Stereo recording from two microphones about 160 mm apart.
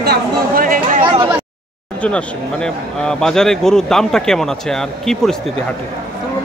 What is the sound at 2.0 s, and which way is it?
Speech, 5° left (ahead or behind).